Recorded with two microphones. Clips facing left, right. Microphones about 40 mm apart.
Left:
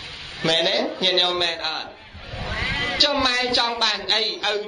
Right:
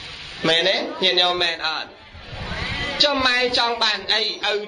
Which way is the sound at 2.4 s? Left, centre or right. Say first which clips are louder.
Left 2 dB; left.